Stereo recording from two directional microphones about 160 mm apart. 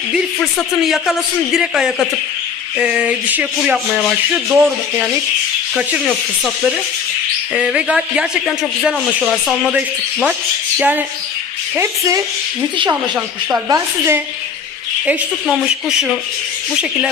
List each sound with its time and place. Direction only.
0.9 s a man's voice: centre (ahead or behind)
10.8 s a sound: 10° right (ahead or behind)
11.8 s a woman's voice: 20° right (ahead or behind)
13.7 s a woman's voice: 20° right (ahead or behind)
15.0 s a man's voice: 5° right (ahead or behind)